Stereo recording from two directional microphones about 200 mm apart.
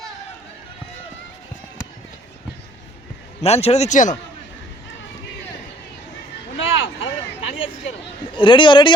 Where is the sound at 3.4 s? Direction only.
30° left (ahead or behind).